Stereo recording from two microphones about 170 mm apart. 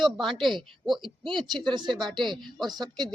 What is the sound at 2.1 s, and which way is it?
Speech, 25° right (ahead or behind).